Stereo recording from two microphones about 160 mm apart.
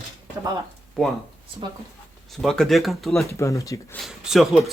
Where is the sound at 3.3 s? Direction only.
20° left (ahead or behind).